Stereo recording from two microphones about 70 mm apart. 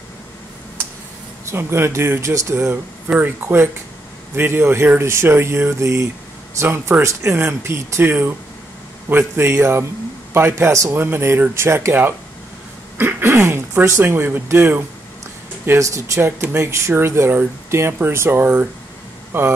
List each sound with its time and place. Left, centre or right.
1.5 s speech: right
3.1 s speech: right
3.4 s speech: right
15.8 s speech: right
16.2 s speech: right